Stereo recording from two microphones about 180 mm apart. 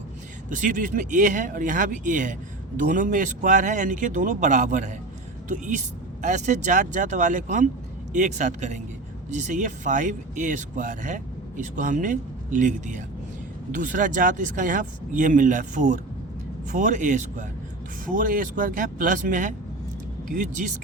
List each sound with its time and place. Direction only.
0.5 s speech: 45° right (ahead or behind)